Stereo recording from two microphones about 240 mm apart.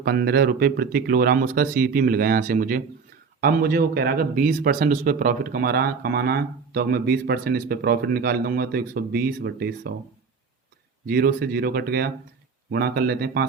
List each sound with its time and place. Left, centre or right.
0.0 s a man's voice: right
11.0 s a man's voice: right